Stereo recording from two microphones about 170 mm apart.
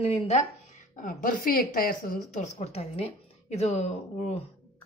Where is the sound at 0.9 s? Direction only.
50° left (ahead or behind).